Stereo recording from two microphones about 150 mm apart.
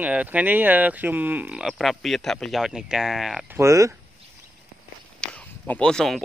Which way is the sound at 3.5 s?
20° right (ahead or behind).